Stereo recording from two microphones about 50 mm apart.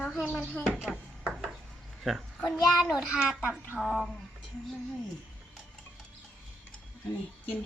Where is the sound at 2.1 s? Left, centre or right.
Centre.